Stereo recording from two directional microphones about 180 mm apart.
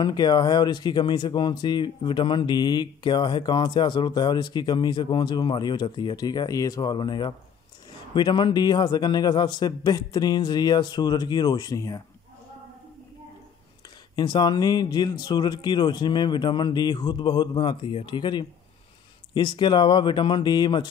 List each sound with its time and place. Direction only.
0.0 s speech: 20° left (ahead or behind)
14.1 s speech: 25° left (ahead or behind)